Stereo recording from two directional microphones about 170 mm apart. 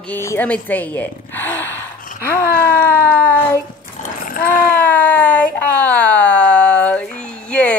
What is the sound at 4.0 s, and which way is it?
Dog, 55° left (ahead or behind).